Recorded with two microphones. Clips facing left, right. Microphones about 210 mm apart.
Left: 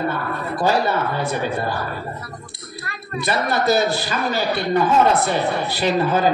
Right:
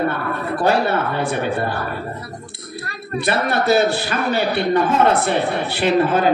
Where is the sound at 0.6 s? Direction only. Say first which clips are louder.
Right 1 dB; 60° right (ahead or behind).